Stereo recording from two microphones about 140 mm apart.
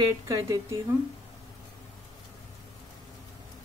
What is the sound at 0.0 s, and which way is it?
Speech, 25° right (ahead or behind).